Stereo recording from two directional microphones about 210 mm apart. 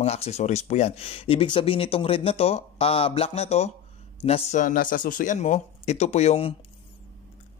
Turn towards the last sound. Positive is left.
turn(degrees=30)  # may be behind; listen again after turning